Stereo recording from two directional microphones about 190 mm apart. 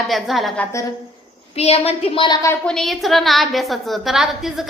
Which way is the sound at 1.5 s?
35° left (ahead or behind).